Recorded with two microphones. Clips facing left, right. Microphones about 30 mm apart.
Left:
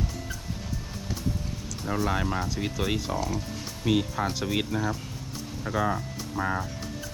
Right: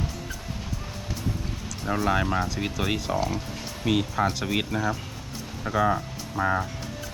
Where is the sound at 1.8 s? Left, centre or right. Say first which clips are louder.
Right 3 dB; right.